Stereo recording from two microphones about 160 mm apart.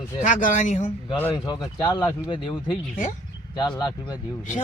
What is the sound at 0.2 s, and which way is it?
Speech, 55° left (ahead or behind).